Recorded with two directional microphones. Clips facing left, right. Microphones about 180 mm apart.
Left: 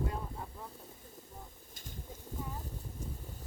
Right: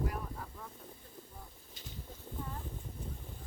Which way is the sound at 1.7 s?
45° left (ahead or behind).